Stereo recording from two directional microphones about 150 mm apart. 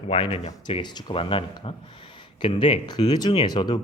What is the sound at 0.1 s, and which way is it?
Speech, 40° left (ahead or behind).